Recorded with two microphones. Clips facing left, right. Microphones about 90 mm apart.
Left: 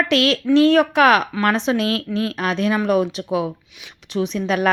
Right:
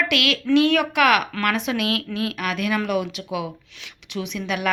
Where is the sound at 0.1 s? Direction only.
35° left (ahead or behind).